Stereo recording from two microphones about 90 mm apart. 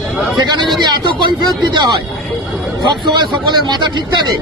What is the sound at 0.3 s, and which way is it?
Speech, 55° right (ahead or behind).